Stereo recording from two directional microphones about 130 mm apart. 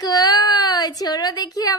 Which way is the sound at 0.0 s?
30° left (ahead or behind).